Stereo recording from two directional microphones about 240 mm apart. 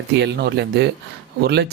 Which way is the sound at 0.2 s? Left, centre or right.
Right.